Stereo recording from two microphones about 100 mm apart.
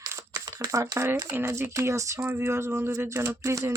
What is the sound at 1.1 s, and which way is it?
Speech, 25° right (ahead or behind).